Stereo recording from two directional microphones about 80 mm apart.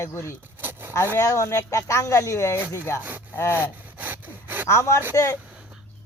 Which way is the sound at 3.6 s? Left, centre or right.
Right.